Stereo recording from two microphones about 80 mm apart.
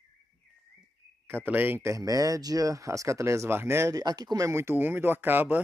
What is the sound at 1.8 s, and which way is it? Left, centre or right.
Speech, right.